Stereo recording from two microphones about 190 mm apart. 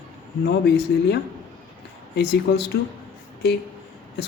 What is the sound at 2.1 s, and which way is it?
A man's voice, 60° left (ahead or behind).